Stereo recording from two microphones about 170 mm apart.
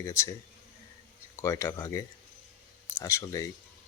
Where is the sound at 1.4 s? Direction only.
15° left (ahead or behind).